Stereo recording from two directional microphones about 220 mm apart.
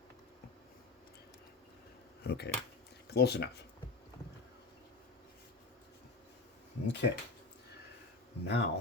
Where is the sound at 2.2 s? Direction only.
50° left (ahead or behind).